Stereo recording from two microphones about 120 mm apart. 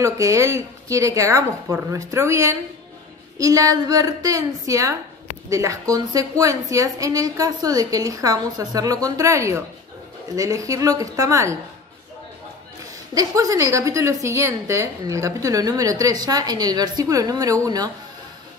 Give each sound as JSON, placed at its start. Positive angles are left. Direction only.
{"t": 0.0, "sound": "a woman's voice", "side_deg": -25}
{"t": 13.1, "sound": "a woman's voice", "side_deg": -30}